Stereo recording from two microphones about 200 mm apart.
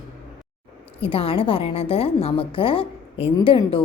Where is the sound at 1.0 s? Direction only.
25° left (ahead or behind).